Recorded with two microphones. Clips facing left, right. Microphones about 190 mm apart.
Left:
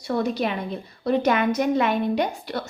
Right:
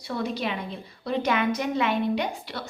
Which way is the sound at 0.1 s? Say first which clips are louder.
Left 5 dB; 50° left (ahead or behind).